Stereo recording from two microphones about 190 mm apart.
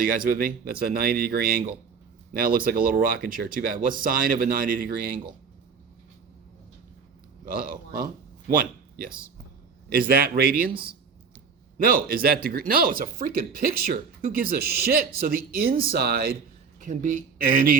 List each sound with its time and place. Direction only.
0.3 s speech: 50° right (ahead or behind)
7.4 s a man's voice: 50° right (ahead or behind)
11.8 s speech: 50° right (ahead or behind)